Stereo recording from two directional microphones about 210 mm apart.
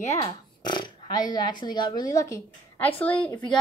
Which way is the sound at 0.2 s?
20° left (ahead or behind).